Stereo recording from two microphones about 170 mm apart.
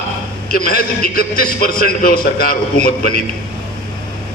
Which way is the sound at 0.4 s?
60° left (ahead or behind).